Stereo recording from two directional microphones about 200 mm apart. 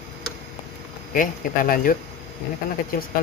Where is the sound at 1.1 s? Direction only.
45° left (ahead or behind).